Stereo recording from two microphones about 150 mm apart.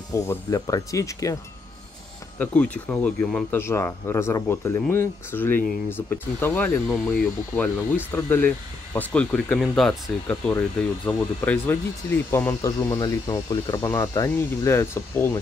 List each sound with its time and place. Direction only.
0.1 s speech: 20° left (ahead or behind)
2.3 s speech: 10° left (ahead or behind)
3.5 s speech: 15° left (ahead or behind)